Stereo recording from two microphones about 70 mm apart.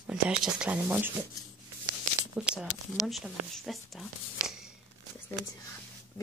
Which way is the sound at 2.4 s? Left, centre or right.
Centre.